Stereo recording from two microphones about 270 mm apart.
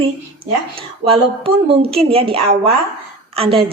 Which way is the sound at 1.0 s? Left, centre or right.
Right.